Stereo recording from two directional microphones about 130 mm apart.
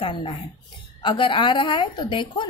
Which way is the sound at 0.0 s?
45° left (ahead or behind).